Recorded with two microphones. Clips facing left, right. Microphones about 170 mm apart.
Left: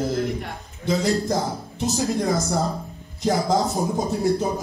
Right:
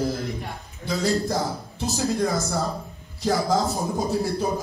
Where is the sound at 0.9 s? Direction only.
20° left (ahead or behind).